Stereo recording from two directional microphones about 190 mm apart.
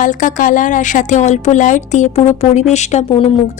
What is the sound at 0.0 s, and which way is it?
A woman's voice, 40° left (ahead or behind).